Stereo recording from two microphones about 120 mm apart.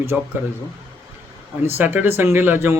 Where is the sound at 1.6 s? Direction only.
15° right (ahead or behind).